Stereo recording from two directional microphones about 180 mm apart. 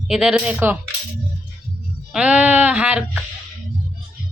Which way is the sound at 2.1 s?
5° right (ahead or behind).